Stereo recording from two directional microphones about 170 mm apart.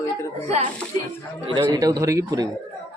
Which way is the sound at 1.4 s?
30° right (ahead or behind).